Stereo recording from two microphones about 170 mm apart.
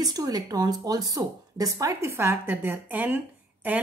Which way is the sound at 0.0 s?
20° right (ahead or behind).